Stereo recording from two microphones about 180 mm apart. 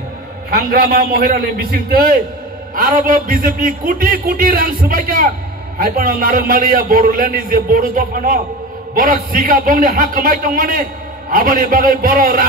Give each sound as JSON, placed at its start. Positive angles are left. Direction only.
{"t": 0.5, "sound": "a man's voice", "side_deg": -60}